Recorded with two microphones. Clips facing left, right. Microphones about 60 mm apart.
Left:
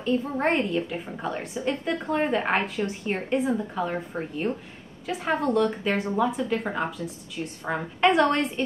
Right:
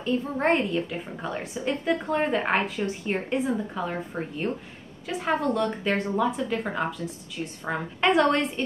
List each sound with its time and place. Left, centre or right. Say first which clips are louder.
0.0 s a woman's voice: left 1 dB; centre